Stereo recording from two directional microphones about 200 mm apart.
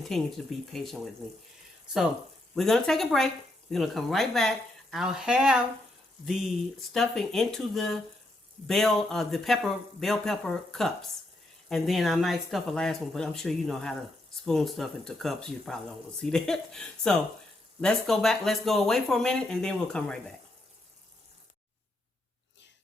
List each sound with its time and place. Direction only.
0.1 s speech: centre (ahead or behind)
2.6 s speech: centre (ahead or behind)